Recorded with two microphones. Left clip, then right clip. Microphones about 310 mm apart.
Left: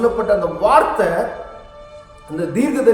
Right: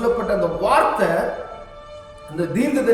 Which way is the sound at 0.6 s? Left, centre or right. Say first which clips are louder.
Left 4 dB; centre.